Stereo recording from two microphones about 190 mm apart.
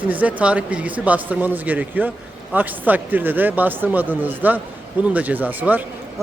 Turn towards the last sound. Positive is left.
turn(degrees=-10)  # may be behind; listen again after turning